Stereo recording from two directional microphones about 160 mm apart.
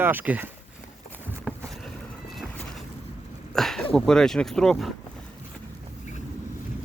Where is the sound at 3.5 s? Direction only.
5° left (ahead or behind).